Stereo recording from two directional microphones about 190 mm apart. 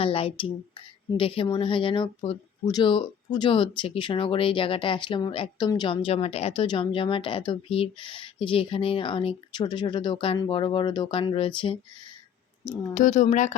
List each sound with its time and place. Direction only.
0.0 s speech: 30° left (ahead or behind)
12.9 s speech: 40° left (ahead or behind)